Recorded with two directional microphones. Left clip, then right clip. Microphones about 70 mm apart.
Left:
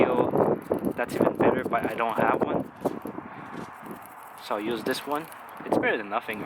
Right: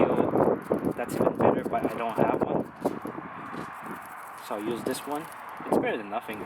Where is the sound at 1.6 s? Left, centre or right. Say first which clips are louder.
Left 2 dB; centre.